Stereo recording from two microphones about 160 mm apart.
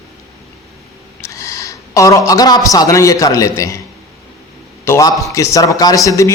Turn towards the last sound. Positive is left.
turn(degrees=20)  # may be behind; listen again after turning